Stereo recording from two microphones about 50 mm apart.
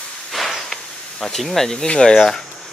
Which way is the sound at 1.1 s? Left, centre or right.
Centre.